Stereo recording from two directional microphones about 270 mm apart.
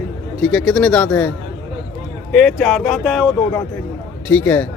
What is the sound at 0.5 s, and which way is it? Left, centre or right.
Speech, centre.